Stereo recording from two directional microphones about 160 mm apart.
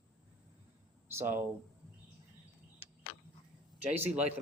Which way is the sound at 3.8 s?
10° right (ahead or behind).